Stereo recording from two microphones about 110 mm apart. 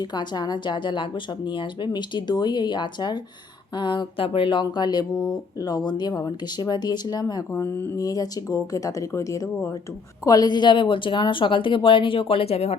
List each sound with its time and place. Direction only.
0.0 s speech: 40° left (ahead or behind); by 12.7 s 70° left (ahead or behind)